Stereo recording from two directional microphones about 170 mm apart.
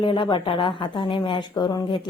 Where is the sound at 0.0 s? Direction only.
30° left (ahead or behind).